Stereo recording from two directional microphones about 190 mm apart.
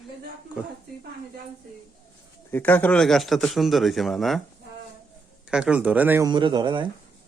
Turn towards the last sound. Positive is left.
turn(degrees=-25)  # may be behind; listen again after turning